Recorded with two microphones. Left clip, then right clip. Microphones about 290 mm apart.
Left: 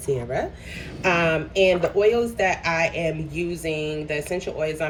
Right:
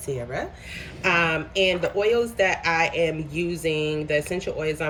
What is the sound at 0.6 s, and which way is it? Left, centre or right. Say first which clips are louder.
Speech: even; centre.